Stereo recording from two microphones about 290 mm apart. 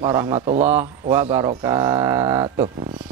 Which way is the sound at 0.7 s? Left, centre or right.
Centre.